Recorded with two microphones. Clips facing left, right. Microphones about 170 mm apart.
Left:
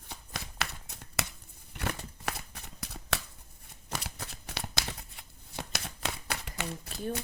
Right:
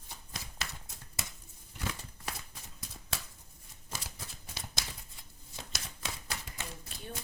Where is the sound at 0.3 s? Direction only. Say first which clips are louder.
Left 6 dB; 65° left (ahead or behind).